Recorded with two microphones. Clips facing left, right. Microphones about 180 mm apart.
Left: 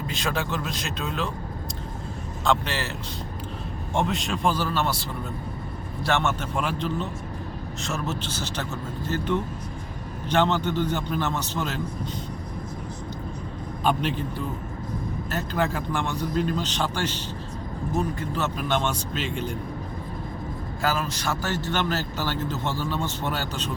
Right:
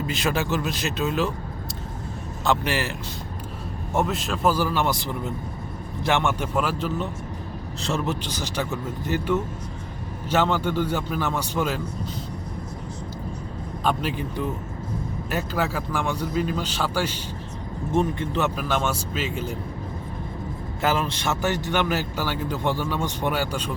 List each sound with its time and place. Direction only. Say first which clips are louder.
0.1 s speech: right 3 dB; 5° right (ahead or behind)
2.4 s speech: right 2 dB; 5° right (ahead or behind)
3.9 s speech: right 1 dB; centre (ahead or behind)
7.8 s a man's voice: right 5 dB; 30° right (ahead or behind)
8.0 s speech: right 2 dB; 15° right (ahead or behind)
13.8 s speech: left 1 dB; 5° right (ahead or behind)
15.3 s speech: right 1 dB; 10° right (ahead or behind)
17.9 s speech: right 5 dB; 25° right (ahead or behind)
18.5 s speech: right 1 dB; 5° right (ahead or behind)
20.8 s speech: right 3 dB; 25° right (ahead or behind)